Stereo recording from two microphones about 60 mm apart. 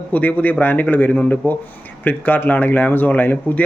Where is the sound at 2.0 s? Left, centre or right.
Left.